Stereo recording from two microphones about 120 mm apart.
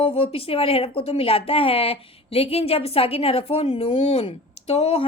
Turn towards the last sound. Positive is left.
turn(degrees=50)  # may be behind; listen again after turning